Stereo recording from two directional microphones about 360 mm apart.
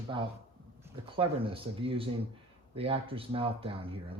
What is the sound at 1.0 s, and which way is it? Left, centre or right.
Speech, centre.